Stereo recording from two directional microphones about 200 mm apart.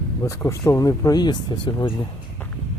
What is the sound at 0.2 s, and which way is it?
Speech, 15° left (ahead or behind).